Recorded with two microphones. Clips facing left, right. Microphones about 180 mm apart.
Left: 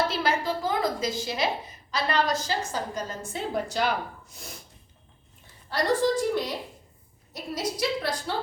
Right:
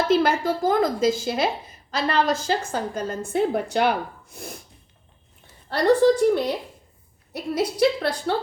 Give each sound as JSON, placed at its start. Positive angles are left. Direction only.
{"t": 0.1, "sound": "a woman's voice", "side_deg": -50}
{"t": 5.7, "sound": "a woman's voice", "side_deg": -60}